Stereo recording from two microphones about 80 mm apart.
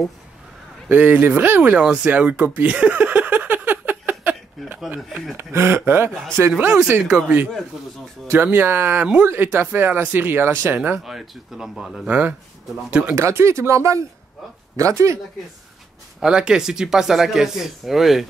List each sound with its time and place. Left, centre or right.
0.8 s speech: right
1.8 s a sound: centre
5.4 s speech: right
6.6 s speech: centre
8.3 s speech: right
11.1 s speech: centre
12.1 s speech: right
13.1 s speech: right
16.2 s speech: centre